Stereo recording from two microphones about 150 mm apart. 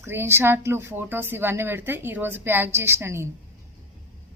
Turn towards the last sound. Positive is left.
turn(degrees=-15)  # may be behind; listen again after turning